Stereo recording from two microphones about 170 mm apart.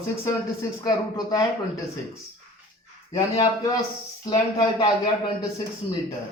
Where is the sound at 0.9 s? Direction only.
20° left (ahead or behind).